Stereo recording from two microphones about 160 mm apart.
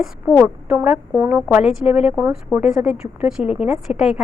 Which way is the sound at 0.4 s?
10° right (ahead or behind).